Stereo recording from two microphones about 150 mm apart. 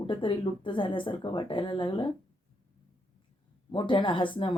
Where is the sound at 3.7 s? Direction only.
30° left (ahead or behind).